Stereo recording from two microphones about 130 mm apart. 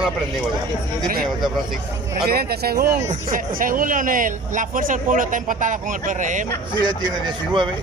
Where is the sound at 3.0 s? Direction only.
90° right.